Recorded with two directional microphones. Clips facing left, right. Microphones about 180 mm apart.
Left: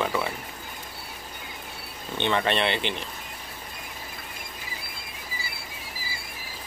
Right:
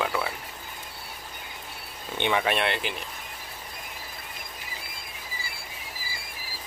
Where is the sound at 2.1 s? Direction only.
10° right (ahead or behind).